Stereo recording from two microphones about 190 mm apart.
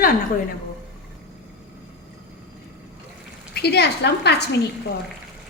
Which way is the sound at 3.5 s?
60° left (ahead or behind).